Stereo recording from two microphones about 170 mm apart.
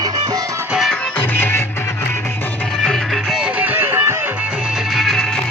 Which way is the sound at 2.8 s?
Centre (ahead or behind).